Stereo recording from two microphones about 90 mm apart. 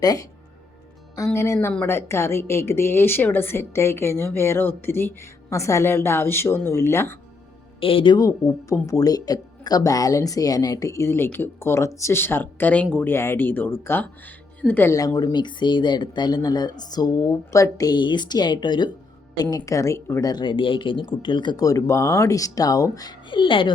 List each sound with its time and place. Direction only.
0.0 s speech: 45° left (ahead or behind)
1.3 s a woman's voice: 30° left (ahead or behind)
7.8 s speech: 85° left
8.2 s a woman's voice: 40° left (ahead or behind); by 13.1 s 15° left (ahead or behind)
13.1 s a woman's voice: 25° left (ahead or behind)
14.8 s speech: 40° left (ahead or behind)
17.9 s speech: 60° left (ahead or behind)
19.4 s speech: 45° left (ahead or behind)
20.3 s speech: 60° left (ahead or behind)
21.5 s speech: 40° left (ahead or behind)
23.3 s speech: 70° left (ahead or behind)